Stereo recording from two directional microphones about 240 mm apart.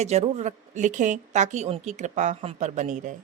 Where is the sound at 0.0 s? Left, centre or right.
Right.